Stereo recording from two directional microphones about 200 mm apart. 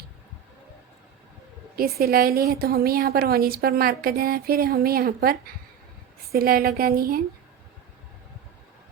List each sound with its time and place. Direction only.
1.7 s a woman's voice: 50° right (ahead or behind)